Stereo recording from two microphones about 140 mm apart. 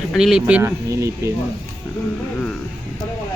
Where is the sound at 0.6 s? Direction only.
20° right (ahead or behind).